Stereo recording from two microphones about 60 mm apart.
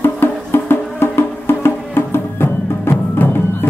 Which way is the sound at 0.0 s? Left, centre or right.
Left.